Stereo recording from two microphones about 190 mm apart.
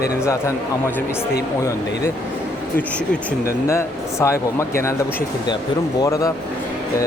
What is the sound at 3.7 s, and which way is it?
Speech, 15° left (ahead or behind).